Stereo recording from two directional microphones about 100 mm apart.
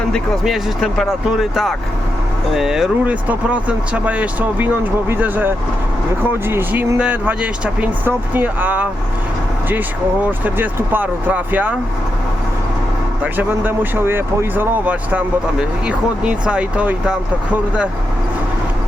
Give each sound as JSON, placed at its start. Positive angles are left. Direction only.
{"t": 0.1, "sound": "speech", "side_deg": 0}
{"t": 3.0, "sound": "speech", "side_deg": -15}
{"t": 10.4, "sound": "speech", "side_deg": -20}
{"t": 13.2, "sound": "speech", "side_deg": -20}